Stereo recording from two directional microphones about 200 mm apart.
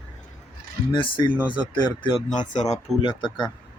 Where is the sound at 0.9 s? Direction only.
25° left (ahead or behind).